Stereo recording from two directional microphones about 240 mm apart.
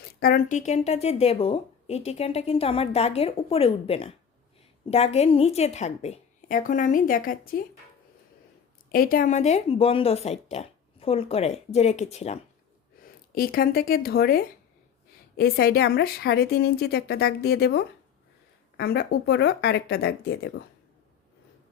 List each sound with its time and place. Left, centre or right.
0.0 s speech: left
8.9 s speech: left
13.3 s a woman's voice: left